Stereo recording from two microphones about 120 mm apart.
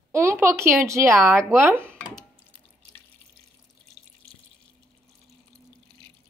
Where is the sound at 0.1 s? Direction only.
20° right (ahead or behind).